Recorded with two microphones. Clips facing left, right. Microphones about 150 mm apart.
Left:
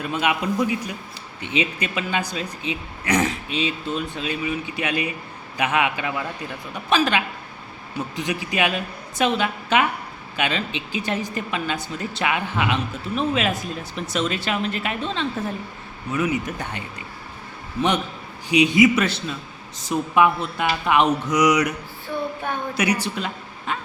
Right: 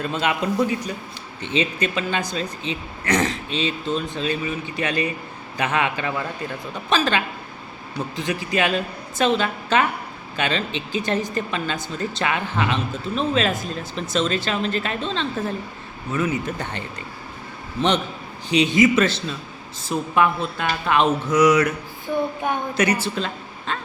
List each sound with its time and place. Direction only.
0.0 s speech: 10° left (ahead or behind)